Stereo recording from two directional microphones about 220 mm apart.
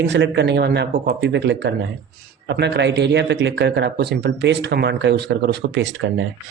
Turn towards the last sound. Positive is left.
turn(degrees=-55)  # may be behind; listen again after turning